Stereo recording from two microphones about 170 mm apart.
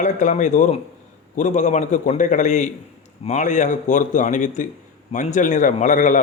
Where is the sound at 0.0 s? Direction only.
45° left (ahead or behind).